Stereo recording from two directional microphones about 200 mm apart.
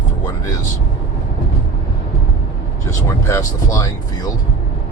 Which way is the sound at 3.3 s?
15° left (ahead or behind).